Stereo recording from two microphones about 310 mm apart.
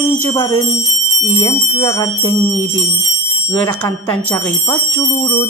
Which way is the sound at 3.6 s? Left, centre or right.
Centre.